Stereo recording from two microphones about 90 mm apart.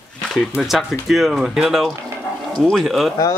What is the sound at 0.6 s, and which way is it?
Speech, centre (ahead or behind).